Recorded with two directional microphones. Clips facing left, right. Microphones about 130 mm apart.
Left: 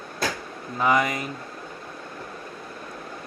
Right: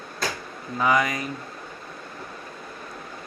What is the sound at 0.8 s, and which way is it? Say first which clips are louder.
Speech: even; 25° left (ahead or behind).